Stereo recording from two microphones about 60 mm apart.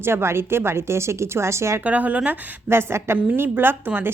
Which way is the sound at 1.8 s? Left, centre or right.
Right.